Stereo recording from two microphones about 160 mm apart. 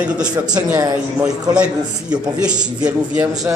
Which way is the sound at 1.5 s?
5° right (ahead or behind).